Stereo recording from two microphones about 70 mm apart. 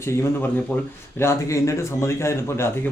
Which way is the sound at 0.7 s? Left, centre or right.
Left.